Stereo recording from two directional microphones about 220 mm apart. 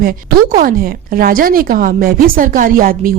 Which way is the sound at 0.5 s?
40° right (ahead or behind).